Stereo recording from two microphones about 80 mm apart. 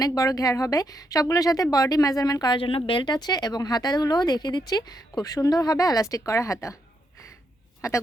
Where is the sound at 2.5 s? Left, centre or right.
Left.